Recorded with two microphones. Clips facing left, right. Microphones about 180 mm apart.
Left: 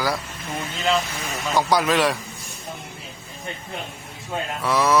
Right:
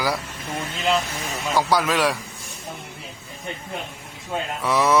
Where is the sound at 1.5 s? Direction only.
5° right (ahead or behind).